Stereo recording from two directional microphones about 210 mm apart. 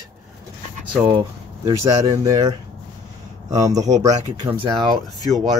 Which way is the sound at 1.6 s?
15° right (ahead or behind).